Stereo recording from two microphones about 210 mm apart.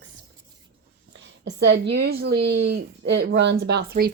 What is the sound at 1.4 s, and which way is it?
A woman's voice, 50° right (ahead or behind).